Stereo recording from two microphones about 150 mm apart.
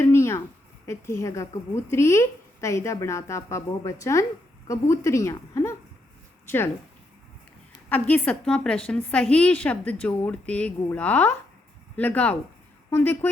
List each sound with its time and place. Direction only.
0.0 s a sound: 20° left (ahead or behind)
0.9 s speech: 20° left (ahead or behind)
7.9 s a woman's voice: 10° left (ahead or behind)